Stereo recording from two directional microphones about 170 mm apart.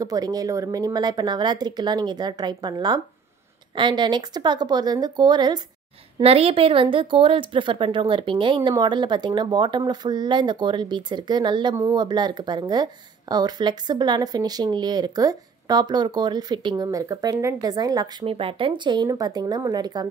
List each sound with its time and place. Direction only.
0.0 s a woman's voice: 20° right (ahead or behind)
6.1 s a woman's voice: 35° right (ahead or behind)